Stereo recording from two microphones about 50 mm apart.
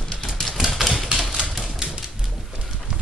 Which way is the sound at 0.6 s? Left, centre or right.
Centre.